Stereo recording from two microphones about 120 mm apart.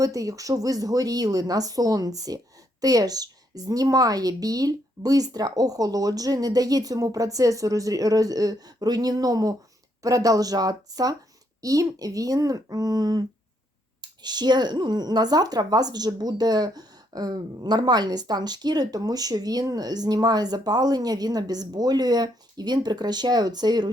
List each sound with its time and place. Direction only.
0.0 s speech: 30° right (ahead or behind)